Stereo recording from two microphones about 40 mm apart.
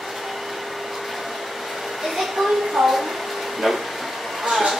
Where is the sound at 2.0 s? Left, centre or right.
Centre.